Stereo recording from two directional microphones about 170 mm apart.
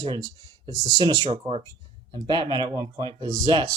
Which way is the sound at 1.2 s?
35° right (ahead or behind).